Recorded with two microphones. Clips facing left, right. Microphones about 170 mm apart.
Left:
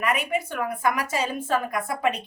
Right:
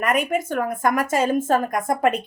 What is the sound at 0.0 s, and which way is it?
Speech, 45° right (ahead or behind).